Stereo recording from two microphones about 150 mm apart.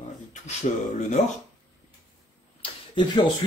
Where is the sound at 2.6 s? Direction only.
30° left (ahead or behind).